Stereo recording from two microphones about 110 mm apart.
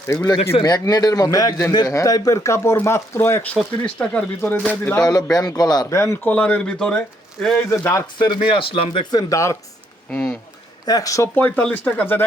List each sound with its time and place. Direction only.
0.1 s a man's voice: 35° left (ahead or behind)
3.8 s speech: 10° left (ahead or behind)
5.0 s a man's voice: 35° left (ahead or behind)
6.0 s speech: 25° left (ahead or behind)
6.3 s speech: 10° left (ahead or behind)
7.7 s speech: 25° left (ahead or behind)
8.2 s speech: 50° left (ahead or behind)
9.3 s speech: 30° left (ahead or behind)
10.1 s speech: 15° left (ahead or behind)
10.8 s a man's voice: 35° left (ahead or behind)
11.3 s speech: 15° left (ahead or behind)